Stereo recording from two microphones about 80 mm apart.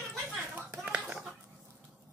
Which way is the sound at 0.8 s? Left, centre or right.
Centre.